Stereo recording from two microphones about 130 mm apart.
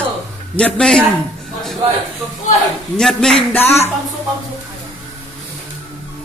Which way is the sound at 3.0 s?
5° left (ahead or behind).